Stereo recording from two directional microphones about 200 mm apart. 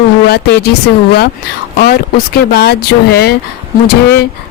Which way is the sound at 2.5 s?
55° left (ahead or behind).